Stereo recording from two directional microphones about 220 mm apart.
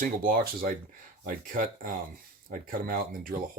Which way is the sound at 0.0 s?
40° right (ahead or behind).